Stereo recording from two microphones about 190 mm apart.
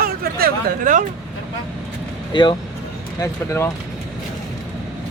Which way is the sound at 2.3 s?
25° left (ahead or behind).